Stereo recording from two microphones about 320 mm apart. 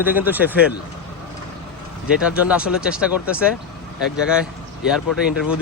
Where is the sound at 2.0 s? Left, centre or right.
Centre.